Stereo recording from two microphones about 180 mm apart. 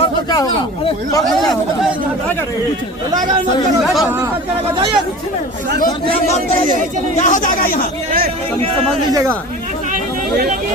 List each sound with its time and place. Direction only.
0.0 s a sound: 20° left (ahead or behind)
7.2 s speech: 45° left (ahead or behind)
9.9 s chatter: 55° right (ahead or behind)